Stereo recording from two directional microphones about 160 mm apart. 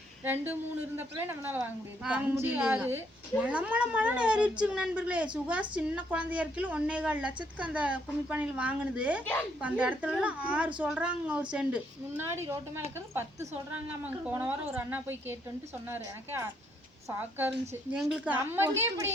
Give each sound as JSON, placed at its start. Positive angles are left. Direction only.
{"t": 0.9, "sound": "a woman's voice", "side_deg": -15}
{"t": 9.2, "sound": "speech", "side_deg": 10}
{"t": 9.6, "sound": "a woman's voice", "side_deg": -10}